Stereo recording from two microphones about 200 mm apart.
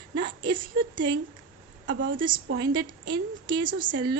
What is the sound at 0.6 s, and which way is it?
Speech, 20° right (ahead or behind).